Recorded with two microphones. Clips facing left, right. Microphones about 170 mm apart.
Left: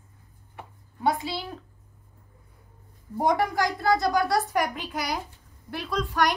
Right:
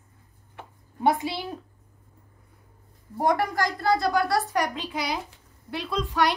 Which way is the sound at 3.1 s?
Centre (ahead or behind).